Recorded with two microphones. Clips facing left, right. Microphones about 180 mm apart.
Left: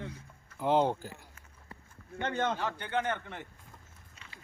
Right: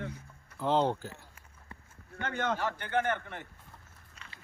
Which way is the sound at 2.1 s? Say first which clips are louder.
Left 1 dB; 25° left (ahead or behind).